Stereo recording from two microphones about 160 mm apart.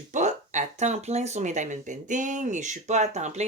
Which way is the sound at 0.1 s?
50° right (ahead or behind).